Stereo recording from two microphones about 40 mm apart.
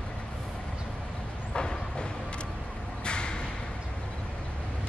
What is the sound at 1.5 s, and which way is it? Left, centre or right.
Vehicle, left.